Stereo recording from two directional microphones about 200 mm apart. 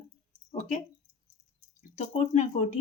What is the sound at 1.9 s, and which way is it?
Speech, 35° left (ahead or behind).